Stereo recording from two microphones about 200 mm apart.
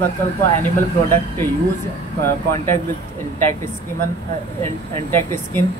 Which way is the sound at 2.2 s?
10° left (ahead or behind).